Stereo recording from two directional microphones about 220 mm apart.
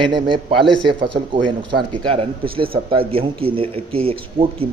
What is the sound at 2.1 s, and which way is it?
Speech, 25° right (ahead or behind).